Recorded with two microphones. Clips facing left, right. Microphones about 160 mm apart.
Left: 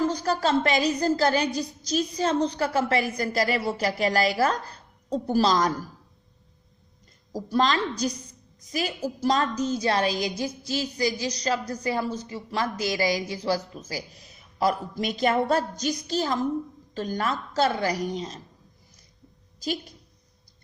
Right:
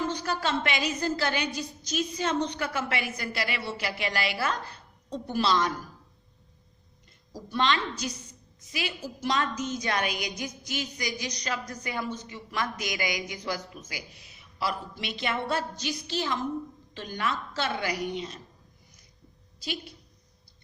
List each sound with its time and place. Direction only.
0.0 s speech: 40° left (ahead or behind)
7.3 s speech: 40° left (ahead or behind)
19.5 s a woman's voice: 40° left (ahead or behind)